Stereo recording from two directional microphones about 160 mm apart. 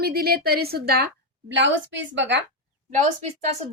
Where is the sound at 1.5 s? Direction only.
90° right.